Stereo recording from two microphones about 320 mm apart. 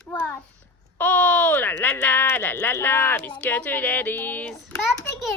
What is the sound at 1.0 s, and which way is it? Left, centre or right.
Speech, centre.